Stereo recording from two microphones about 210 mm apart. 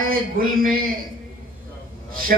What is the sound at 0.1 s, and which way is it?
Speech, 45° right (ahead or behind).